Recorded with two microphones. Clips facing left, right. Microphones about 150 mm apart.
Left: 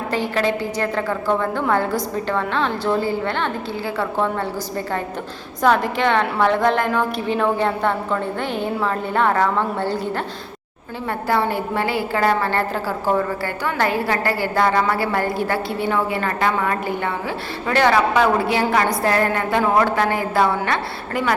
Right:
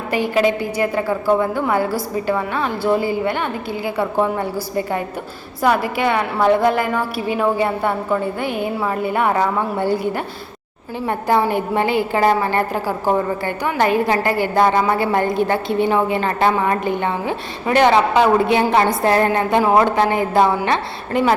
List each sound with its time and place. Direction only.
0.1 s a woman's voice: 15° right (ahead or behind)
5.6 s a woman's voice: 10° right (ahead or behind)